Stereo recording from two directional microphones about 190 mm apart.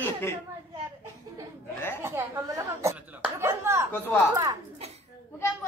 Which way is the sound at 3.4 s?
15° right (ahead or behind).